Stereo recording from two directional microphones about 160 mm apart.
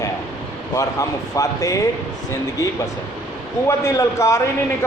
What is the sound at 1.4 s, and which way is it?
Speech, 20° left (ahead or behind).